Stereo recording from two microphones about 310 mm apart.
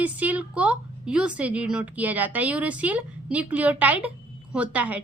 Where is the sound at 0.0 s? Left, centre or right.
Centre.